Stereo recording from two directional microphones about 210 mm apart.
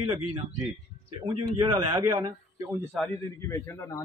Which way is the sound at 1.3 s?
90° right.